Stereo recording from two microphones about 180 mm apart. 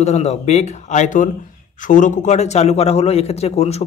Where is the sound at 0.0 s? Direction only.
35° left (ahead or behind).